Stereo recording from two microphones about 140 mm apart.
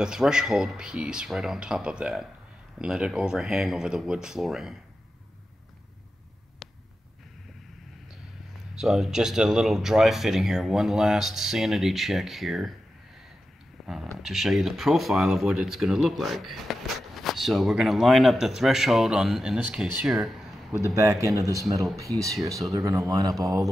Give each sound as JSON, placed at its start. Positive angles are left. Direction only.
{"t": 0.0, "sound": "speech", "side_deg": -5}
{"t": 8.7, "sound": "speech", "side_deg": 0}
{"t": 13.8, "sound": "a sound", "side_deg": 0}
{"t": 14.2, "sound": "speech", "side_deg": 0}
{"t": 20.8, "sound": "speech", "side_deg": -20}